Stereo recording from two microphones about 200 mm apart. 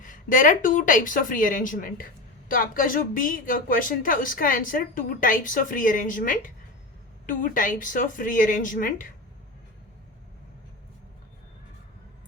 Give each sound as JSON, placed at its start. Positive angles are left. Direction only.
{"t": 0.0, "sound": "speech", "side_deg": 40}